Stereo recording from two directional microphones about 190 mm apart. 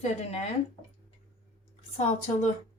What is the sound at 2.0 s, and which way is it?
Speech, 35° left (ahead or behind).